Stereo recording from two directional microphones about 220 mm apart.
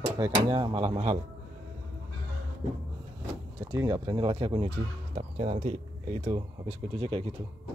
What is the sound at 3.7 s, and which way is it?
Speech, 20° right (ahead or behind).